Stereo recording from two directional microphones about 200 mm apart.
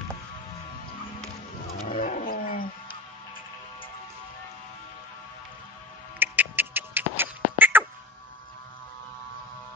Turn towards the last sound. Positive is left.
turn(degrees=-10)  # may be behind; listen again after turning